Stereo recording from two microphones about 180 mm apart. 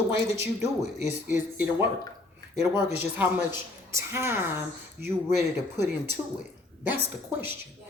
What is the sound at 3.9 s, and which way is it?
Speech, 15° right (ahead or behind).